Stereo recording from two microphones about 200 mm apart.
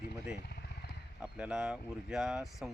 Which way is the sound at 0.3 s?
55° left (ahead or behind).